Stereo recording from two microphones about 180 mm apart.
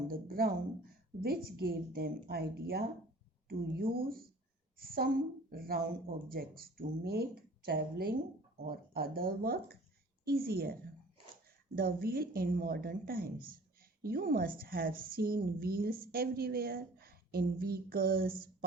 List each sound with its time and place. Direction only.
0.1 s a woman's voice: 55° right (ahead or behind)